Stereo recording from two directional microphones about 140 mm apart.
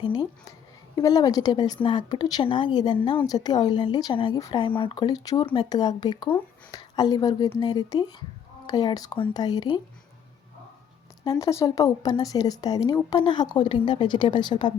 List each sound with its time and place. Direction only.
0.0 s speech: 30° left (ahead or behind)
11.3 s speech: 25° left (ahead or behind)